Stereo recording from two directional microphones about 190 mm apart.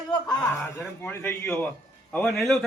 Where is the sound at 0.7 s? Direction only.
10° left (ahead or behind).